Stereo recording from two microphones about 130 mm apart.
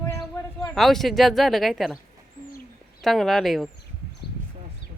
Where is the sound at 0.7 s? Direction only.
Centre (ahead or behind).